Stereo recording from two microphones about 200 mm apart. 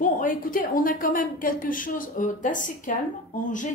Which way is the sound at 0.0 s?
45° left (ahead or behind).